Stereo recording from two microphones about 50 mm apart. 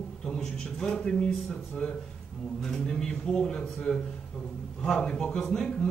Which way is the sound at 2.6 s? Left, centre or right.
Centre.